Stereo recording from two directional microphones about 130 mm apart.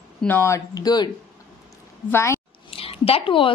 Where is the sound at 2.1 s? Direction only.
20° left (ahead or behind).